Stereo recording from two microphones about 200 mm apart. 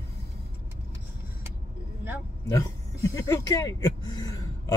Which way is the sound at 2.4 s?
15° left (ahead or behind).